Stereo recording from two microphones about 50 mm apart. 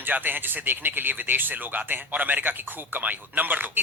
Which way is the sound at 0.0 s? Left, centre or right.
Right.